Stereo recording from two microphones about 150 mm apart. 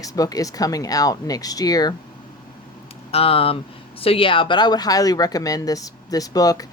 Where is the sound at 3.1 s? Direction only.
40° left (ahead or behind); by 6.7 s 25° left (ahead or behind).